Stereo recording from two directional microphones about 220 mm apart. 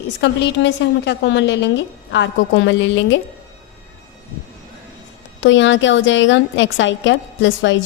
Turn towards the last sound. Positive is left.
turn(degrees=55)  # may be behind; listen again after turning